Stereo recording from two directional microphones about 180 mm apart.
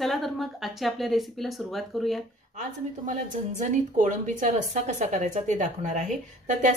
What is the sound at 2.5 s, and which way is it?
A woman's voice, 45° right (ahead or behind).